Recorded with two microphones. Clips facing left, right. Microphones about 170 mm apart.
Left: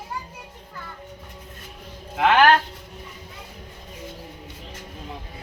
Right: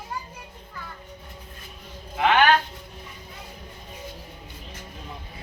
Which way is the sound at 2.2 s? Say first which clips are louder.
Left 2 dB; 75° left (ahead or behind).